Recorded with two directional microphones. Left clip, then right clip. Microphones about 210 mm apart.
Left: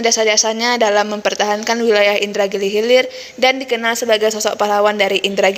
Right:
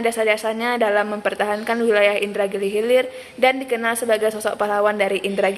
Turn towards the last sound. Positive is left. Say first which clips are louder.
# left 5 dB
turn(degrees=25)  # may be behind; listen again after turning